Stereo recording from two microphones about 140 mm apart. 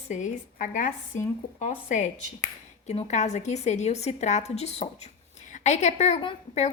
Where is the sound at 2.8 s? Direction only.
50° left (ahead or behind).